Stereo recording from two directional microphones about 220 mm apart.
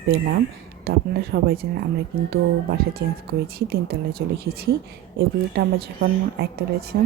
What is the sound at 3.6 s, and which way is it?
Speech, 45° right (ahead or behind).